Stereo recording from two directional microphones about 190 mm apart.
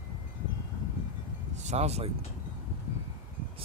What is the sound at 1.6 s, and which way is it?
Speech, 35° right (ahead or behind).